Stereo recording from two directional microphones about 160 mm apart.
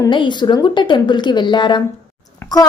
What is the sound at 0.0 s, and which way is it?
A woman's voice, 30° left (ahead or behind).